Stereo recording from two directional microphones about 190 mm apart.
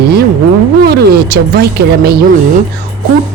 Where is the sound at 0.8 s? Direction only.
55° right (ahead or behind).